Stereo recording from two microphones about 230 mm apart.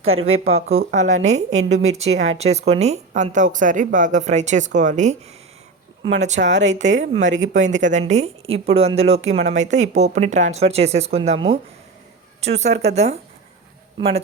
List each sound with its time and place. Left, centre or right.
0.0 s a woman's voice: right
6.1 s a woman's voice: right